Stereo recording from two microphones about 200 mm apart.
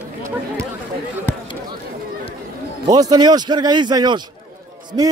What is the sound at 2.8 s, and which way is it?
A man's voice, 20° right (ahead or behind).